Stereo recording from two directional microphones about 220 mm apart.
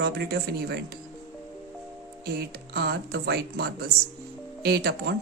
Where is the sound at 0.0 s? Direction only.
50° right (ahead or behind).